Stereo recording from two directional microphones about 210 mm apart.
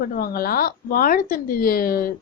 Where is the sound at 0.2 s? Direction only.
45° left (ahead or behind).